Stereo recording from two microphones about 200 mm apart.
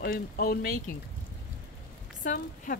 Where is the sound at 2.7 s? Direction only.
40° left (ahead or behind).